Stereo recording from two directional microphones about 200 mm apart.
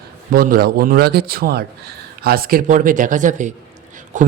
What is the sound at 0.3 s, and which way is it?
A man's voice, 45° right (ahead or behind).